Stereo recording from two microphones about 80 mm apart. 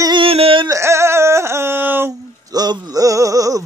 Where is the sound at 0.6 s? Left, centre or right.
Right.